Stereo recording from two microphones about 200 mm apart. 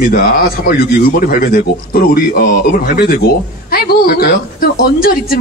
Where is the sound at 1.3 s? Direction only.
45° left (ahead or behind).